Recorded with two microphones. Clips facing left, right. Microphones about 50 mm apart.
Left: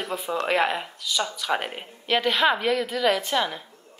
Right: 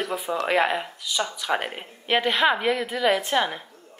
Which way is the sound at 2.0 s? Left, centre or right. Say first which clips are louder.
Right 1 dB; right.